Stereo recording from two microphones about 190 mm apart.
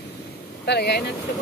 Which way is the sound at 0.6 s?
60° left (ahead or behind).